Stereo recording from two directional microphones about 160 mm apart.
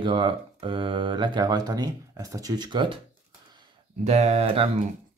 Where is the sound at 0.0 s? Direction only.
30° right (ahead or behind).